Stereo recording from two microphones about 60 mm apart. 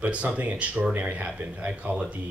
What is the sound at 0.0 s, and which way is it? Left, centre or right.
Speech, right.